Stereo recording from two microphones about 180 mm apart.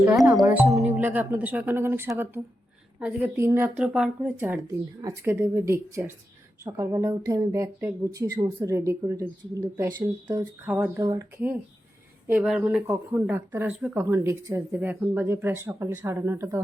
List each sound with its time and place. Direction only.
0.4 s speech: 15° right (ahead or behind)
10.7 s speech: 10° right (ahead or behind)
12.3 s speech: 5° right (ahead or behind)